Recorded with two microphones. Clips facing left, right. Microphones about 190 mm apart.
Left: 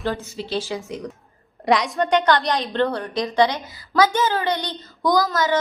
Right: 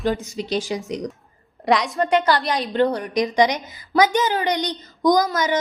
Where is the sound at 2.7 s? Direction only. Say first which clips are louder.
Right 2 dB; 15° right (ahead or behind).